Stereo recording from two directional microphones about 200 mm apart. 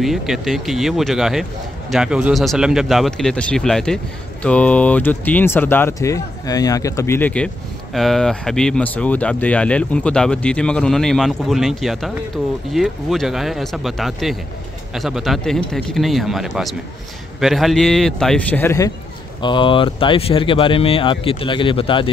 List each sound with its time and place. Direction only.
0.0 s a man's voice: centre (ahead or behind)
19.4 s speech: 25° left (ahead or behind)